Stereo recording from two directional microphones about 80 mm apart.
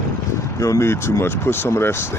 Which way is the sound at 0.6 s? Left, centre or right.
Left.